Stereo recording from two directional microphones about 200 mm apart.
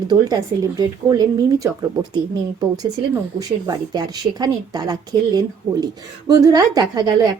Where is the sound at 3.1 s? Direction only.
15° right (ahead or behind).